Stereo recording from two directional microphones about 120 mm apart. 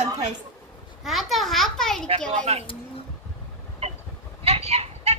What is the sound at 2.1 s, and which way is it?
Speech, 60° right (ahead or behind).